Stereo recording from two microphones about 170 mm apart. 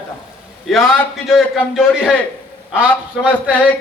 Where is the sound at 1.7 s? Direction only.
5° right (ahead or behind).